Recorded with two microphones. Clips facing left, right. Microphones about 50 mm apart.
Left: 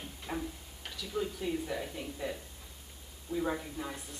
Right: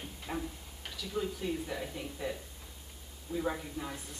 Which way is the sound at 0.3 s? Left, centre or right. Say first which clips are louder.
Even; centre.